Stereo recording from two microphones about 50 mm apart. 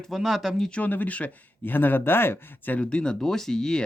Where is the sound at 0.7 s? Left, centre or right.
Left.